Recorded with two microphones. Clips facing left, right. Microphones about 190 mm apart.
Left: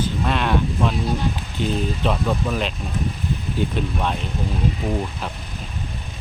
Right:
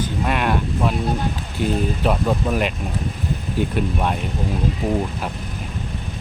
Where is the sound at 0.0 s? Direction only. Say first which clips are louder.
Right 1 dB; 10° right (ahead or behind).